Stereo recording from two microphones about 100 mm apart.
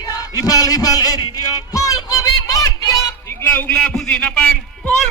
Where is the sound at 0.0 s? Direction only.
40° left (ahead or behind).